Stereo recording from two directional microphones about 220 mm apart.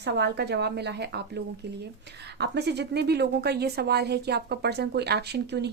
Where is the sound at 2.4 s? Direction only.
50° right (ahead or behind).